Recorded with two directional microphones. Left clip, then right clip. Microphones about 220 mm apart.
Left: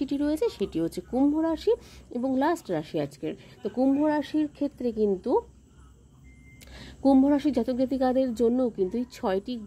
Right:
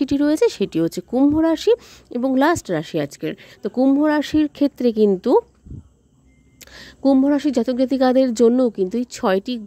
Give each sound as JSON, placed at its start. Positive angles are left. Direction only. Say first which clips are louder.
{"t": 0.0, "sound": "speech", "louder": "right 10 dB", "side_deg": -40}
{"t": 6.6, "sound": "speech", "louder": "right 6 dB", "side_deg": -35}